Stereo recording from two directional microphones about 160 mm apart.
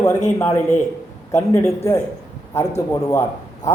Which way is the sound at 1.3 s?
20° left (ahead or behind).